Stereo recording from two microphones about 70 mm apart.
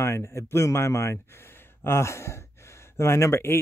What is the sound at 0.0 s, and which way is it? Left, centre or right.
Speech, left.